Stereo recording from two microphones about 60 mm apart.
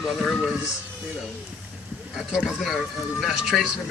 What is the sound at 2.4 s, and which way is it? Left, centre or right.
Speech, centre.